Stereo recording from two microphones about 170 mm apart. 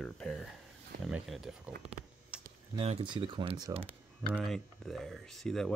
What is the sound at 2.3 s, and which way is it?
Computer keyboard, 5° right (ahead or behind).